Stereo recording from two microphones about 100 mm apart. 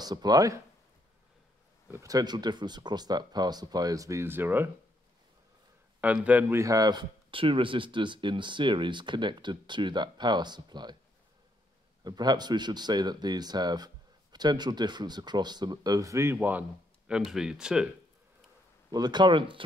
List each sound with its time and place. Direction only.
0.0 s speech: 40° right (ahead or behind)
1.9 s speech: 35° right (ahead or behind)
5.9 s speech: 15° right (ahead or behind)
6.6 s speech: 40° right (ahead or behind)
12.0 s speech: 45° right (ahead or behind)
16.3 s speech: 20° right (ahead or behind)
17.1 s speech: 5° right (ahead or behind)
18.9 s speech: 45° right (ahead or behind)